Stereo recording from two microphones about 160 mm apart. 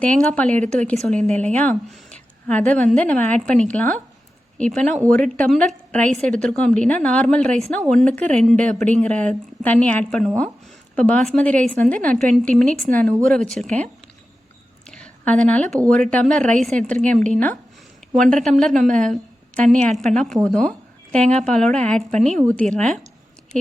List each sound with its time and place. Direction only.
0.3 s a woman's voice: 10° left (ahead or behind)
1.1 s a woman's voice: 45° right (ahead or behind)
1.4 s a woman's voice: 10° left (ahead or behind)
2.1 s a sound: 10° left (ahead or behind)
2.9 s a woman's voice: 10° left (ahead or behind)
4.9 s a woman's voice: 50° right (ahead or behind)
5.1 s a woman's voice: 5° left (ahead or behind)
14.8 s a sound: 5° left (ahead or behind)
15.4 s a woman's voice: 5° left (ahead or behind)
22.1 s a woman's voice: 45° right (ahead or behind)
22.4 s a woman's voice: 5° left (ahead or behind)